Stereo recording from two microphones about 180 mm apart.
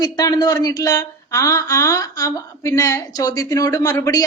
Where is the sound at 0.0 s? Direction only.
20° left (ahead or behind).